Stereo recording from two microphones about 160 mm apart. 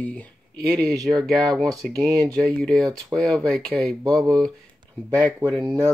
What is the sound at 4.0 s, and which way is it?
Speech, 20° right (ahead or behind).